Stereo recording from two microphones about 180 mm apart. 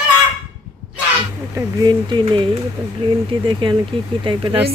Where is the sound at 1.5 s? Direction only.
20° right (ahead or behind).